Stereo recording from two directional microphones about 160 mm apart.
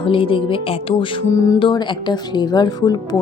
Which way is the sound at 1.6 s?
30° left (ahead or behind).